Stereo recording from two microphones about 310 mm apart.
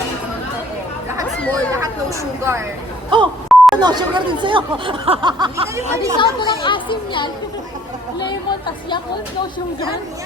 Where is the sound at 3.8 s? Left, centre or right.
Centre.